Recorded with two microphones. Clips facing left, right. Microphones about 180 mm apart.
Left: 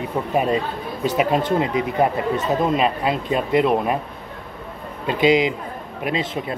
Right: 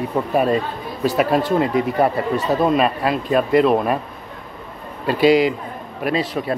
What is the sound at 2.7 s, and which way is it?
Speech, 20° left (ahead or behind).